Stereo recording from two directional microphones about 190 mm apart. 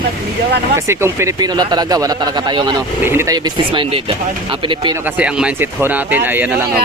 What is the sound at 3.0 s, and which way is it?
Speech, 10° right (ahead or behind).